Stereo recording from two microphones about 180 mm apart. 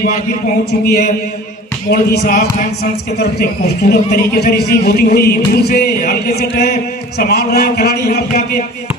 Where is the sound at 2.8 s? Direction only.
65° left (ahead or behind).